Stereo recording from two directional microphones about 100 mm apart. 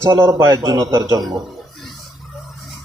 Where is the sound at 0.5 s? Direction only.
45° right (ahead or behind).